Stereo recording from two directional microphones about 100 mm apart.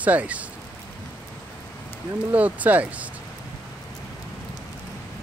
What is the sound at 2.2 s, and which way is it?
Speech, 15° right (ahead or behind).